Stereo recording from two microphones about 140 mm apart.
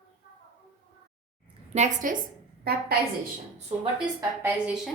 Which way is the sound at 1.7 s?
60° right (ahead or behind).